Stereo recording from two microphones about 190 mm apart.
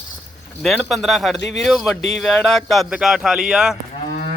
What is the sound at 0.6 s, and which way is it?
Speech, centre (ahead or behind).